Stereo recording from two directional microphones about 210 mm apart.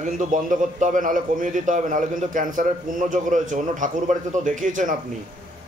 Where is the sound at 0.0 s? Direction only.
35° right (ahead or behind).